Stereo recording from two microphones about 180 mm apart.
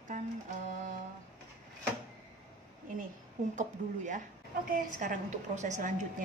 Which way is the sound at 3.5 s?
45° right (ahead or behind).